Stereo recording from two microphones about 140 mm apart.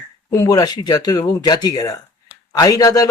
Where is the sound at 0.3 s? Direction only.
25° left (ahead or behind).